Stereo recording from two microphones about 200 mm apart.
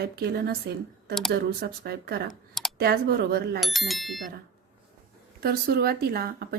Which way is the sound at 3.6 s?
Centre (ahead or behind).